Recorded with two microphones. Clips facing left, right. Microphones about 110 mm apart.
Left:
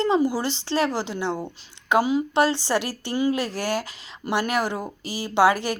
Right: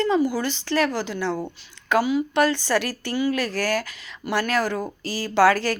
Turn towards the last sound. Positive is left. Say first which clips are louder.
# right 1 dB
turn(degrees=20)  # may be behind; listen again after turning